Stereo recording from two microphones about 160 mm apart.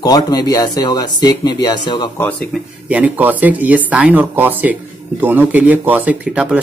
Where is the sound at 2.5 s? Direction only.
10° right (ahead or behind).